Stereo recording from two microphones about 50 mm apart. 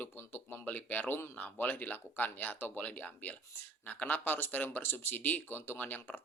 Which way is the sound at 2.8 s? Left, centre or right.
Left.